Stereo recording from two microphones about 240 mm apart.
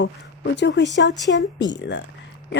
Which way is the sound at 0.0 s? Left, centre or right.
Left.